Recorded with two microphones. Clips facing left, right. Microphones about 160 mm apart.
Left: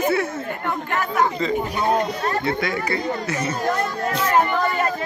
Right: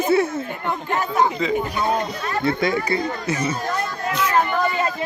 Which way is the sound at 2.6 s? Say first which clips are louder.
Right 3 dB; 25° right (ahead or behind).